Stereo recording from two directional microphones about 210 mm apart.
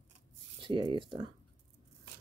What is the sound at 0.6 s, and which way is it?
Speech, 25° right (ahead or behind).